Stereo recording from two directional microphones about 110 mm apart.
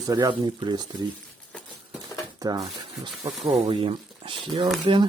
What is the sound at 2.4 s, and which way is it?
Speech, 35° right (ahead or behind).